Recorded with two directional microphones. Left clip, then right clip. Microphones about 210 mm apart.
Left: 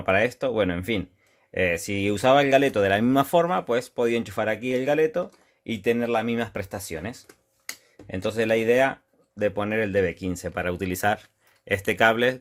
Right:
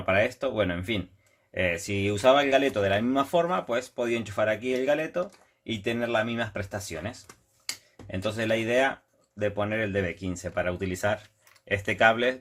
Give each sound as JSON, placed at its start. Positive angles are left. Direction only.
{"t": 0.0, "sound": "speech", "side_deg": 50}